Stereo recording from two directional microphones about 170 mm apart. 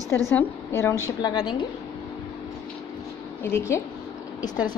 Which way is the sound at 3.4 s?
15° left (ahead or behind).